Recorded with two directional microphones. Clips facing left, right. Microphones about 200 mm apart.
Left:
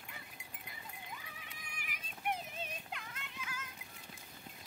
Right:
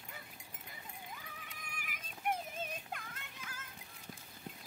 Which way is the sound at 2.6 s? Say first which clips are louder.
Right 2 dB; 50° right (ahead or behind).